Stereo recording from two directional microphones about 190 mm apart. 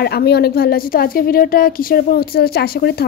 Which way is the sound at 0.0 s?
55° left (ahead or behind).